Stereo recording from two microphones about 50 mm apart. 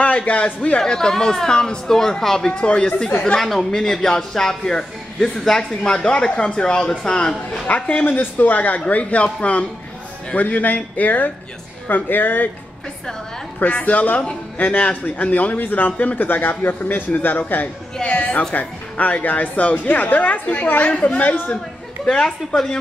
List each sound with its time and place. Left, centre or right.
0.0 s speech: left
3.3 s speech: centre
8.0 s a man's voice: left
13.6 s a man's voice: left
18.0 s a woman's voice: left